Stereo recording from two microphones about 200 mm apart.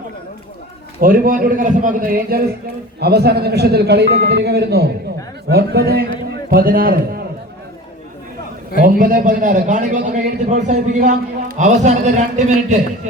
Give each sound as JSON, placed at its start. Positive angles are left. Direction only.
{"t": 1.0, "sound": "a man's voice", "side_deg": -45}
{"t": 8.8, "sound": "a man's voice", "side_deg": -40}